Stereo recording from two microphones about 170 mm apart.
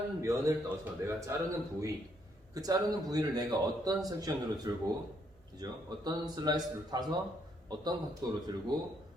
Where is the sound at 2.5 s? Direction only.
20° right (ahead or behind).